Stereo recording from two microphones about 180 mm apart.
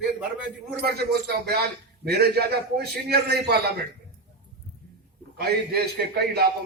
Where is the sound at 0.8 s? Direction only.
65° right (ahead or behind).